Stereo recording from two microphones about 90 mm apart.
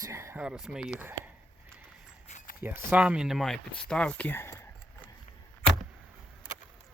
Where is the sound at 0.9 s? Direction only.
20° right (ahead or behind).